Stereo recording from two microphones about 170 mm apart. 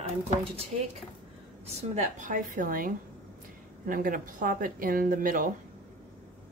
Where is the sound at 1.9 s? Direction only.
50° right (ahead or behind).